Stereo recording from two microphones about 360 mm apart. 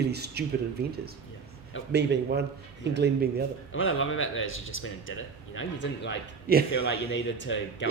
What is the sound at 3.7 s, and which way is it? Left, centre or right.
Speech, left.